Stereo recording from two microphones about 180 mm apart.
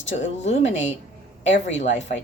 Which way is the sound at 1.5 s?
90° left.